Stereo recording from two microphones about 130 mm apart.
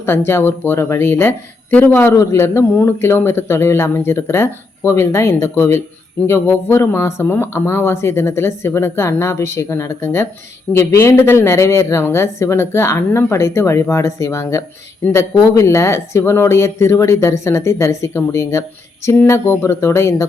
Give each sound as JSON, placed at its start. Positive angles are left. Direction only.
{"t": 0.3, "sound": "speech", "side_deg": 15}